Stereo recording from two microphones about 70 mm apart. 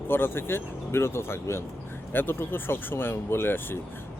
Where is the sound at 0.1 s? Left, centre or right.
Left.